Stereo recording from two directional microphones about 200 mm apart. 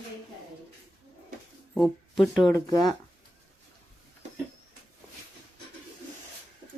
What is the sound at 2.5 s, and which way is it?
Speech, 15° left (ahead or behind).